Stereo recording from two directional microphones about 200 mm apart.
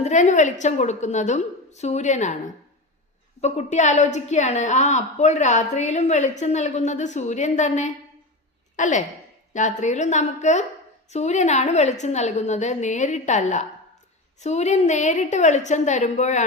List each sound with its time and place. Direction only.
0.0 s a woman's voice: 35° left (ahead or behind)
3.4 s a woman's voice: 35° left (ahead or behind)